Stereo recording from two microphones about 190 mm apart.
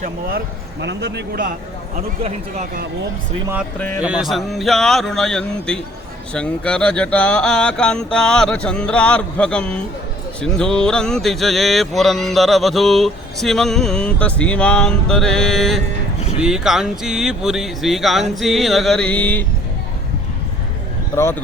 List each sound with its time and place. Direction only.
0.8 s a man's voice: 65° right (ahead or behind)
4.0 s music: 5° right (ahead or behind)